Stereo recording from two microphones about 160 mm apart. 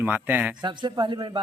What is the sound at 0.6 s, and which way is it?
Speech, 30° right (ahead or behind).